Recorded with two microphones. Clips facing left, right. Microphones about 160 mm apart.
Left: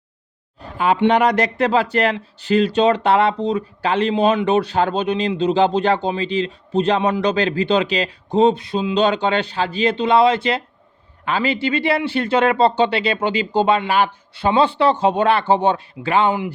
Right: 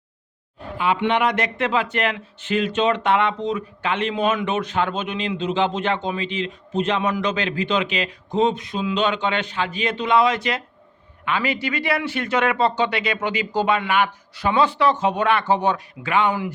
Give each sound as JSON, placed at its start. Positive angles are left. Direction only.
{"t": 0.8, "sound": "speech", "side_deg": 40}